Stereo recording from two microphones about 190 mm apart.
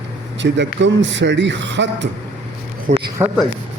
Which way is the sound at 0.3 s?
70° right (ahead or behind).